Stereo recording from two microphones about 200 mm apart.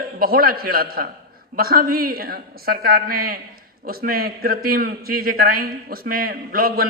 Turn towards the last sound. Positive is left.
turn(degrees=-50)  # may be behind; listen again after turning